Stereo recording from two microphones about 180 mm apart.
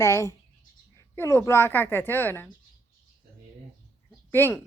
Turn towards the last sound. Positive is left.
turn(degrees=10)  # may be behind; listen again after turning